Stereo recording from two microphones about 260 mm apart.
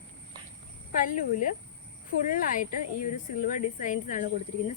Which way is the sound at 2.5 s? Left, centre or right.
Left.